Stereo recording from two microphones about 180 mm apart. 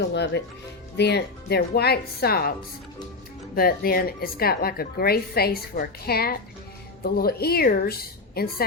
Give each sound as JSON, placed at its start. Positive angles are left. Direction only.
{"t": 0.0, "sound": "a woman's voice", "side_deg": 70}